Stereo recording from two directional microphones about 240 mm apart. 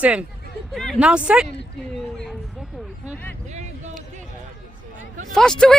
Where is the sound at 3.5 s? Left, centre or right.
Right.